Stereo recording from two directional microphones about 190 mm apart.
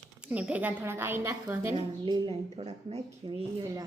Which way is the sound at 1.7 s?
25° right (ahead or behind).